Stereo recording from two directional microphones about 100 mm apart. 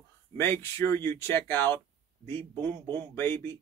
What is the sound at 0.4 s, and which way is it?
Speech, 25° left (ahead or behind).